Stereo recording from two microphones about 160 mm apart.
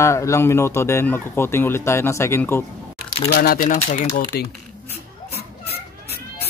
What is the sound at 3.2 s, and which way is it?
Speech, 70° left (ahead or behind).